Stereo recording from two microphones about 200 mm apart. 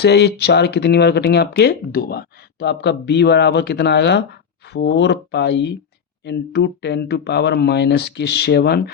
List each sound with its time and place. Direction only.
0.0 s speech: 55° left (ahead or behind)